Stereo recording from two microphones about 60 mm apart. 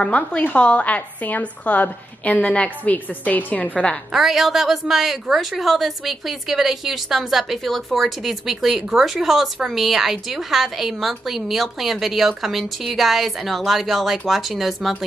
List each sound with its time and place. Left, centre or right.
0.0 s a woman's voice: centre
4.1 s a woman's voice: centre